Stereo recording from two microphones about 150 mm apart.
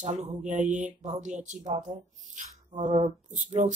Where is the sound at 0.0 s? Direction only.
55° right (ahead or behind).